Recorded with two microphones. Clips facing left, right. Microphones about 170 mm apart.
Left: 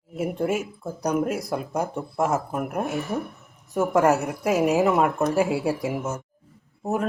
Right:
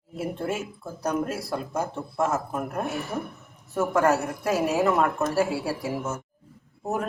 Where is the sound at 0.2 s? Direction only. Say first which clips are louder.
Left 4 dB; 15° left (ahead or behind).